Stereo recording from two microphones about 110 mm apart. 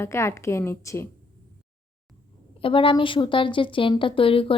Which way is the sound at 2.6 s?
55° left (ahead or behind).